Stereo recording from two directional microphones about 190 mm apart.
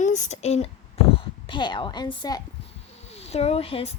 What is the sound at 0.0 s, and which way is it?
A woman's voice, 40° left (ahead or behind).